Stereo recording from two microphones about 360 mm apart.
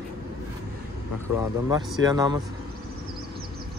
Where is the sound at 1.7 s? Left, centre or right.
Centre.